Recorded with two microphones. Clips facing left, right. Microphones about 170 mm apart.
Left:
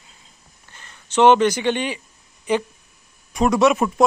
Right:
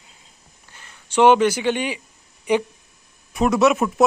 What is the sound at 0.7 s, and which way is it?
A man's voice, 10° right (ahead or behind).